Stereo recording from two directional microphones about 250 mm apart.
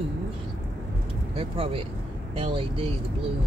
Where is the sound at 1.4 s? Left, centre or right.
Right.